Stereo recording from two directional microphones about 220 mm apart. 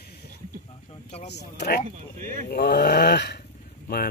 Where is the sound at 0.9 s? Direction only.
25° left (ahead or behind).